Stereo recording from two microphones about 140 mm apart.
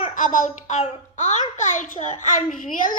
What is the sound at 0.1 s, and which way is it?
A child's voice, 70° left (ahead or behind).